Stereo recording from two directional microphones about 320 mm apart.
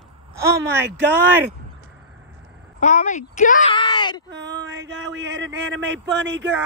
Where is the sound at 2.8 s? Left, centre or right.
Left.